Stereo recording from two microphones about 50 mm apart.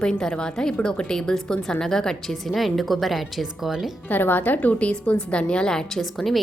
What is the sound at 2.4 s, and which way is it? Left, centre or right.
Speech, centre.